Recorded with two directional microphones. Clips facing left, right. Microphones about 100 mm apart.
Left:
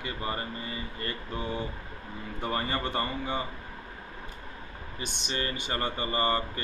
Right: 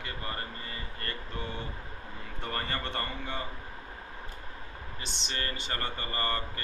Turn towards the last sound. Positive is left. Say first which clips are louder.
# left 5 dB
turn(degrees=20)  # may be behind; listen again after turning